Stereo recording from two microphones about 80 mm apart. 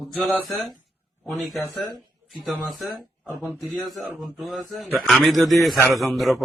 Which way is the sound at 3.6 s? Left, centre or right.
Centre.